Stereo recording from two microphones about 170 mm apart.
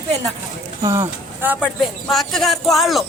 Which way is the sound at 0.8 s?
15° right (ahead or behind).